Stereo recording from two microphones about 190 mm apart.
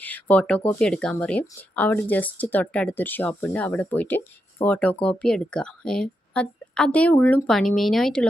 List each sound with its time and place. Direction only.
0.0 s a woman's voice: 10° left (ahead or behind)